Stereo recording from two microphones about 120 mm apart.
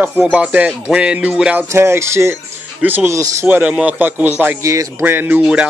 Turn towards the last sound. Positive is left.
turn(degrees=-10)  # may be behind; listen again after turning